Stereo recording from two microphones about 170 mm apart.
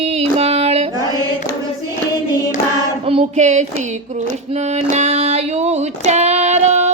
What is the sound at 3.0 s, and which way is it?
Child singing, 40° right (ahead or behind).